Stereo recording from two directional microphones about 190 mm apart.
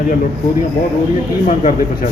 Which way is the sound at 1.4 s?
40° left (ahead or behind).